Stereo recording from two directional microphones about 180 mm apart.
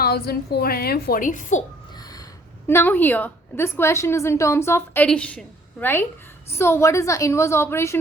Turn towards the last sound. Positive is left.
turn(degrees=15)  # may be behind; listen again after turning